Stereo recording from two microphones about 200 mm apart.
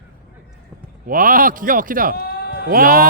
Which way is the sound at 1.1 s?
45° right (ahead or behind).